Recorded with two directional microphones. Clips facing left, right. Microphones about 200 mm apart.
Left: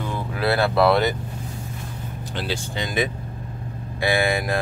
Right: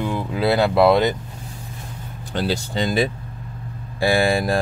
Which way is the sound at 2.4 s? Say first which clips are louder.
Right 6 dB; 40° right (ahead or behind).